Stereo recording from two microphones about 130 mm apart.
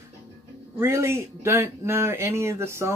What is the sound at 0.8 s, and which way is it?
Speech, 20° right (ahead or behind).